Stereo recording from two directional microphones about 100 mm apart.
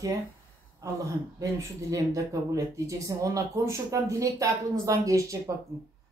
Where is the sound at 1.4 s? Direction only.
30° right (ahead or behind).